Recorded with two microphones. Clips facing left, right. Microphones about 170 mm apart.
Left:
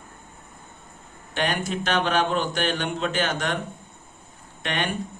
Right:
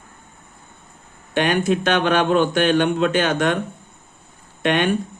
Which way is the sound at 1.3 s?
60° right (ahead or behind).